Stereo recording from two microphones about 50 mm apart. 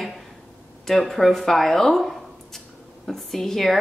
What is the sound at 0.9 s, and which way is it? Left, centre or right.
Speech, centre.